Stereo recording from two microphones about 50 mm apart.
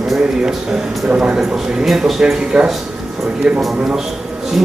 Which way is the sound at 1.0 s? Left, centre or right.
Centre.